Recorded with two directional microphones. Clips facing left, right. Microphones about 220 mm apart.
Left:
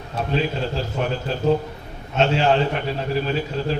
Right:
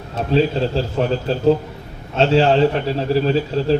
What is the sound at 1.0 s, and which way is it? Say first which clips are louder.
Speech: right 5 dB; 35° right (ahead or behind).